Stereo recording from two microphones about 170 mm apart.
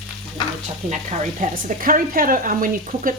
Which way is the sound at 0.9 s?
45° right (ahead or behind).